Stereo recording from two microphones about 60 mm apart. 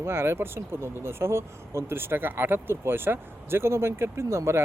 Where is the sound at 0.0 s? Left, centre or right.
Right.